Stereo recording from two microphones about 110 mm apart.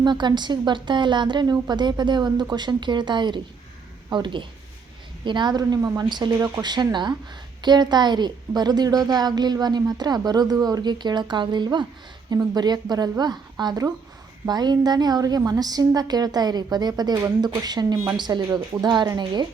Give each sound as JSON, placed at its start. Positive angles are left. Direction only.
{"t": 0.0, "sound": "a woman's voice", "side_deg": -40}